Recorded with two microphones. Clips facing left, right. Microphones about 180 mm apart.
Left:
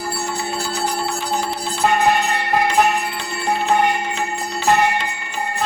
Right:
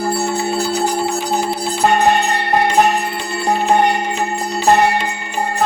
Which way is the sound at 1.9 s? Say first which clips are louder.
Right 2 dB; 35° right (ahead or behind).